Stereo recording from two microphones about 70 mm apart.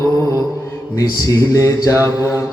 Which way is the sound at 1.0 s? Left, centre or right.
Left.